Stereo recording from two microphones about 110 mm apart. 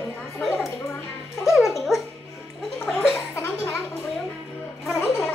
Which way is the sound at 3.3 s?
20° left (ahead or behind).